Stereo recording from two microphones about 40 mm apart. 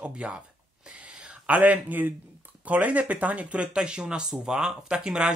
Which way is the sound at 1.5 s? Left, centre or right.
Right.